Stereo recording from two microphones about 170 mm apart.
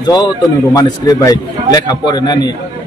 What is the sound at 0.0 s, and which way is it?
A man's voice, 25° left (ahead or behind).